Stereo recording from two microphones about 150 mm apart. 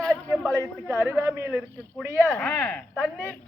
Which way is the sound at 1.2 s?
15° right (ahead or behind).